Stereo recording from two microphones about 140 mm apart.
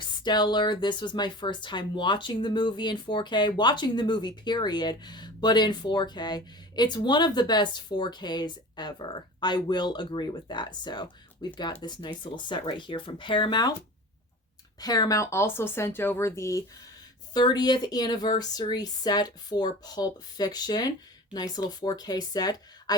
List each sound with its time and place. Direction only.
0.0 s speech: 30° left (ahead or behind)
14.8 s speech: 25° left (ahead or behind)